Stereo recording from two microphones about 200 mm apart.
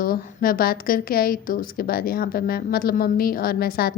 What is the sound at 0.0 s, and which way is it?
A woman's voice, 45° left (ahead or behind).